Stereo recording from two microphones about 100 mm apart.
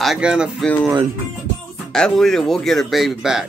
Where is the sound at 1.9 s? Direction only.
5° left (ahead or behind).